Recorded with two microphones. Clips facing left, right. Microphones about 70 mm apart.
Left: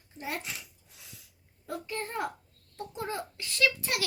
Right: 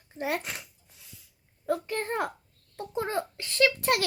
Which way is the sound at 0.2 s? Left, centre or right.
Right.